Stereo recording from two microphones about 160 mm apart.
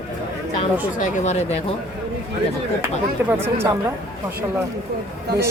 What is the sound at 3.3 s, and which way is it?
Speech, 15° right (ahead or behind).